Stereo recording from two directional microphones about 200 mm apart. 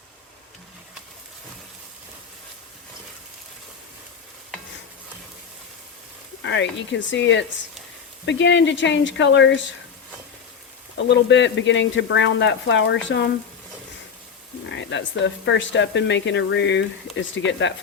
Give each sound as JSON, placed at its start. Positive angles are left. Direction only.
{"t": 6.4, "sound": "speech", "side_deg": 65}
{"t": 10.9, "sound": "speech", "side_deg": 65}
{"t": 14.7, "sound": "speech", "side_deg": 65}